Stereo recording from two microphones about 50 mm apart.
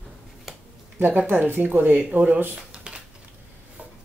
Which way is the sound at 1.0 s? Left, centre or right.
Right.